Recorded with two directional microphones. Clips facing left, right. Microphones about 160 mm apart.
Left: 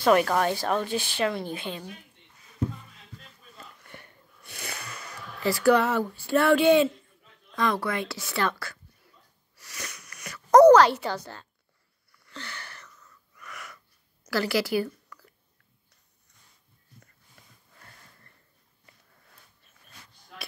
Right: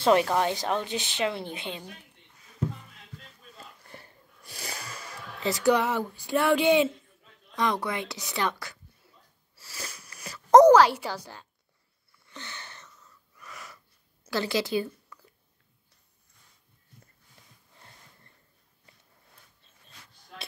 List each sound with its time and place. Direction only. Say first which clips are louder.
0.0 s a woman's voice: left 1 dB; 25° right (ahead or behind)
3.5 s a sound: left 1 dB; 30° right (ahead or behind)
4.7 s a woman's voice: even; 30° right (ahead or behind)
9.6 s a sound: even; 30° right (ahead or behind)
10.6 s a woman's voice: left 5 dB; 10° right (ahead or behind)
12.1 s wheeze: left 2 dB; 20° right (ahead or behind)
14.3 s speech: left 2 dB; 20° right (ahead or behind)
17.7 s wheeze: left 1 dB; 25° right (ahead or behind)